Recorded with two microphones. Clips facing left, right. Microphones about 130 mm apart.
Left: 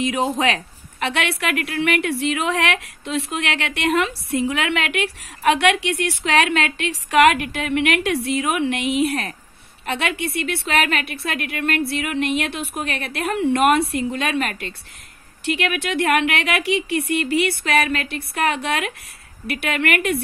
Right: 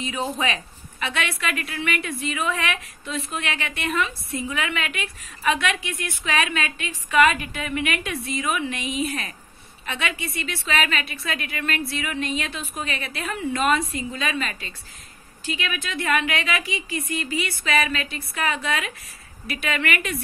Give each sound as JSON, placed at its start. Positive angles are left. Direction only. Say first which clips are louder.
{"t": 0.4, "sound": "a woman's voice", "louder": "left 5 dB", "side_deg": 70}